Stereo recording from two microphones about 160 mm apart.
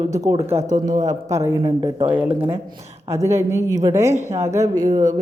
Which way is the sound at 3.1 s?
15° right (ahead or behind).